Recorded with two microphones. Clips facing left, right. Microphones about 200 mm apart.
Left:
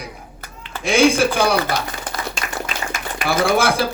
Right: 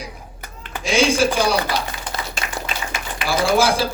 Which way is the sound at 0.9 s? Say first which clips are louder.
Left 2 dB; 60° left (ahead or behind).